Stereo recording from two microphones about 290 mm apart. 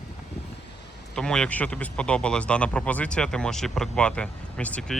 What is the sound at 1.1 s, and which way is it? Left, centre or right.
Speech, centre.